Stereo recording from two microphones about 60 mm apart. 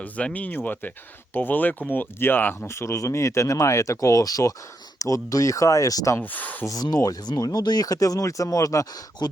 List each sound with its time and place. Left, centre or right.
0.0 s speech: left
2.6 s speech: left
6.1 s speech: left
6.7 s speech: left